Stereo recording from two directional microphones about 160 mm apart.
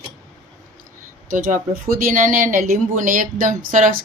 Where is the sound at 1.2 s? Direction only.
60° right (ahead or behind).